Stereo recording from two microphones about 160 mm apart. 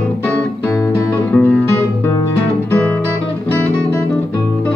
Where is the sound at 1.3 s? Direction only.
10° left (ahead or behind).